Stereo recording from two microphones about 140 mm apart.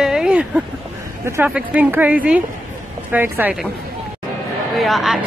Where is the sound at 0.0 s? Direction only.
5° right (ahead or behind).